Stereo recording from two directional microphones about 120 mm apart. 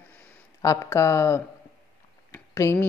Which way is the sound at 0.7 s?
25° left (ahead or behind).